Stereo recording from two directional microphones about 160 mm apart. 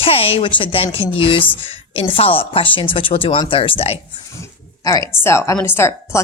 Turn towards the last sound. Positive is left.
turn(degrees=15)  # may be behind; listen again after turning